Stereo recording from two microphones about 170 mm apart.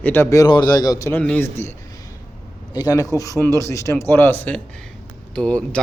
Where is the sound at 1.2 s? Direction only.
10° left (ahead or behind).